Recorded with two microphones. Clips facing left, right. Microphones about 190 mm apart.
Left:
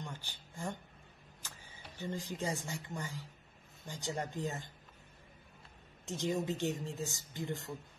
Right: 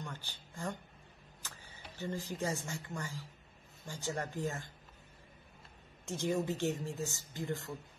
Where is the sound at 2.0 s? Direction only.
15° left (ahead or behind).